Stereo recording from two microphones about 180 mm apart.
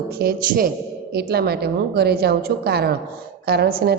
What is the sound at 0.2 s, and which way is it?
A woman's voice, 55° right (ahead or behind).